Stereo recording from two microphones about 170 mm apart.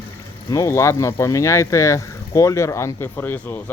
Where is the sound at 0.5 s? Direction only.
15° left (ahead or behind).